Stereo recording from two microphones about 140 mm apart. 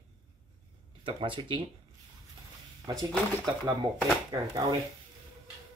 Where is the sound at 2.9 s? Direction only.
25° right (ahead or behind).